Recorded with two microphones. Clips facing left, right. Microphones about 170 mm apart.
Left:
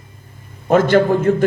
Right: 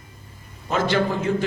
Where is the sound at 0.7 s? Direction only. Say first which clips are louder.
Left 9 dB; 50° left (ahead or behind).